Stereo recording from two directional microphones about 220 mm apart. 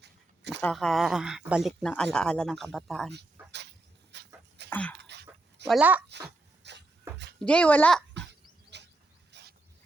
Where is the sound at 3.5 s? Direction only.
50° right (ahead or behind).